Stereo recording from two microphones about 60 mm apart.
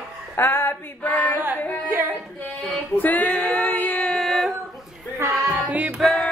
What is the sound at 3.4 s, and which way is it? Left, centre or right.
Music, centre.